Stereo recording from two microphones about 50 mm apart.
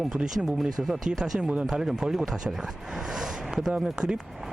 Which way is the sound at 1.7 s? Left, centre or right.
Centre.